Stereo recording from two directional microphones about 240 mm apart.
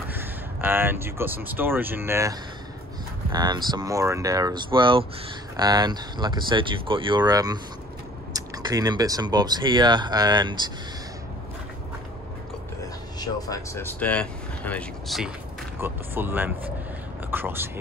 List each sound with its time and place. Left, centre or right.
0.1 s speech: centre
13.2 s speech: centre